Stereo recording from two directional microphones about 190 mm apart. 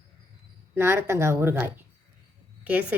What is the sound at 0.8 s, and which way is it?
Speech, 15° right (ahead or behind).